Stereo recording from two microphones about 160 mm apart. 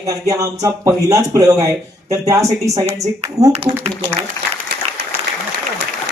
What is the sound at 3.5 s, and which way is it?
Speech, 40° right (ahead or behind).